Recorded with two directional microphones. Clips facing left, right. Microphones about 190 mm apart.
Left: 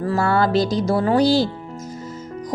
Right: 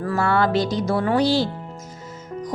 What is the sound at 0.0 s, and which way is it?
A woman's voice, 35° left (ahead or behind).